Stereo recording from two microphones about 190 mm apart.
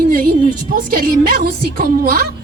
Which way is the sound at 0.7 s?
50° right (ahead or behind).